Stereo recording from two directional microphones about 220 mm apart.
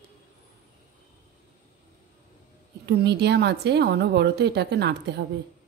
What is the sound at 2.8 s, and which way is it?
A woman's voice, 50° right (ahead or behind).